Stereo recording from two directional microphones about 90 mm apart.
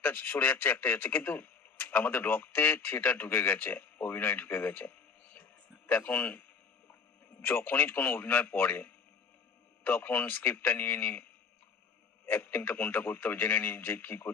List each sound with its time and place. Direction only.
0.0 s speech: 20° left (ahead or behind)
7.4 s speech: 25° left (ahead or behind)